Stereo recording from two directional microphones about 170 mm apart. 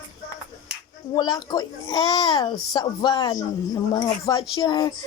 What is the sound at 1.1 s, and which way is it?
A child's voice, 25° left (ahead or behind).